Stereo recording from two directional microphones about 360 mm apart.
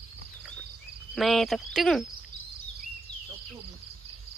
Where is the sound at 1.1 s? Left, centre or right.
Centre.